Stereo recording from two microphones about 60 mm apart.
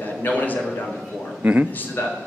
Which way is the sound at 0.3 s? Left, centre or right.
Left.